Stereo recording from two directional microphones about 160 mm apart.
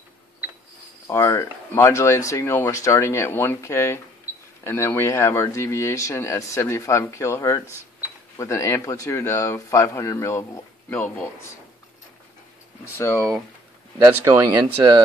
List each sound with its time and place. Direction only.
1.0 s speech: 20° left (ahead or behind)
12.8 s speech: 15° left (ahead or behind)
13.9 s speech: 20° right (ahead or behind)